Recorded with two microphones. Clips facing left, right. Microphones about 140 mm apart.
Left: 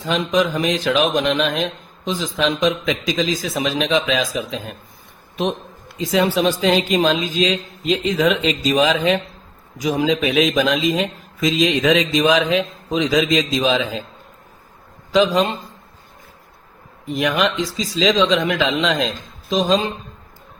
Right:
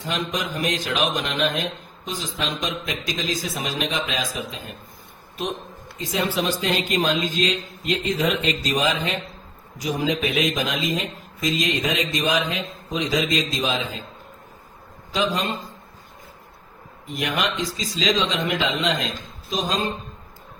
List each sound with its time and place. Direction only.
0.0 s speech: 90° left
6.0 s speech: 90° left
15.1 s speech: 90° left
17.2 s speech: 90° left